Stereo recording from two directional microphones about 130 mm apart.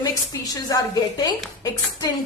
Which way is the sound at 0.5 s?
30° left (ahead or behind).